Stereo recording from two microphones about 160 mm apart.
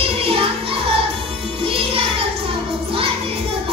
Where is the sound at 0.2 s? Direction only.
35° right (ahead or behind).